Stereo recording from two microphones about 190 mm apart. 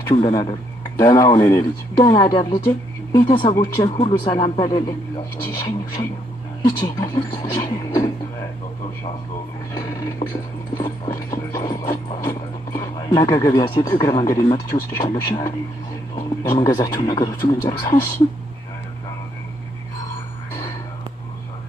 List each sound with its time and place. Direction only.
0.1 s speech: 20° left (ahead or behind)
3.9 s speech: 25° left (ahead or behind)
9.7 s speech: 20° left (ahead or behind)
10.8 s a sound: 20° left (ahead or behind)
16.4 s speech: 20° left (ahead or behind)